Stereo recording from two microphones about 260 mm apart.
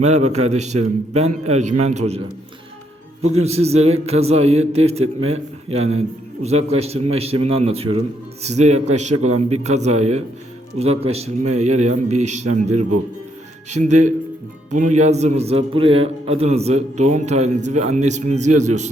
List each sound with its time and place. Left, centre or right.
0.0 s a man's voice: right
3.4 s a man's voice: right